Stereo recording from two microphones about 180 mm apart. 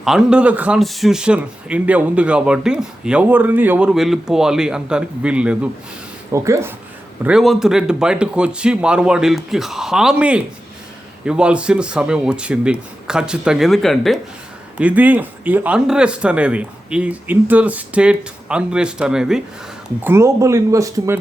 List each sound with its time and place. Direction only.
0.0 s speech: 5° right (ahead or behind)
6.3 s speech: 15° right (ahead or behind)
7.2 s speech: 5° right (ahead or behind)
20.1 s speech: 15° right (ahead or behind)